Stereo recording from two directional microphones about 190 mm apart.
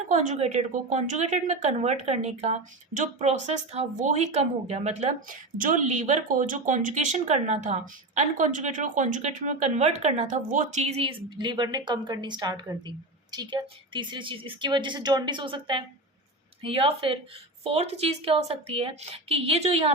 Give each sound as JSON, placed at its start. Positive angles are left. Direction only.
{"t": 0.1, "sound": "a woman's voice", "side_deg": -40}